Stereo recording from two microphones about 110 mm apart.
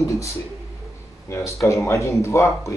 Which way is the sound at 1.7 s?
25° left (ahead or behind).